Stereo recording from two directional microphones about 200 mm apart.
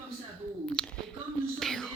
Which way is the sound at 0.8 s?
5° left (ahead or behind).